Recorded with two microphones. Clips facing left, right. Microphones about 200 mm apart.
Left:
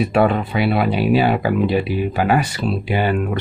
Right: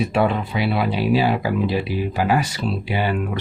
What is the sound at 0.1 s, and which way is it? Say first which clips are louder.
Speech: left 3 dB; 55° left (ahead or behind).